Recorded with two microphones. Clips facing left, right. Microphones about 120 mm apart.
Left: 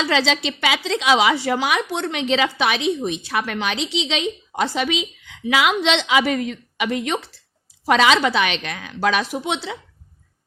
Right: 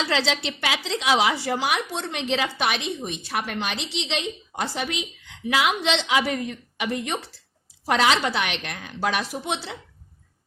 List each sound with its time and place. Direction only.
0.1 s a woman's voice: 90° left